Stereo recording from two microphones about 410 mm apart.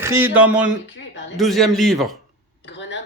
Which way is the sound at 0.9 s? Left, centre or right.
Left.